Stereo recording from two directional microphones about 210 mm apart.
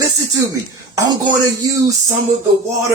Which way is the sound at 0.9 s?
20° right (ahead or behind).